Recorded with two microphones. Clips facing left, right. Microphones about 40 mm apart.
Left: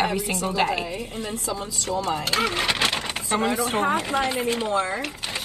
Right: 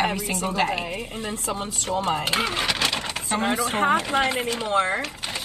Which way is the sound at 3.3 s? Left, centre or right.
Right.